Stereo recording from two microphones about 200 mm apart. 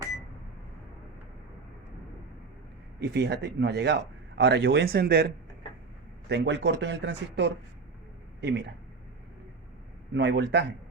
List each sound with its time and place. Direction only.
3.0 s speech: 55° right (ahead or behind)
10.2 s speech: 60° right (ahead or behind)